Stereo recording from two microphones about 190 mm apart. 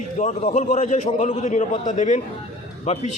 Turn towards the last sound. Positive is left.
turn(degrees=35)  # may be behind; listen again after turning